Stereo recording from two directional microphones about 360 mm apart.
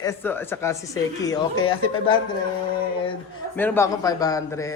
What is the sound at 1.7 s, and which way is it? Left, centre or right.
Speech, left.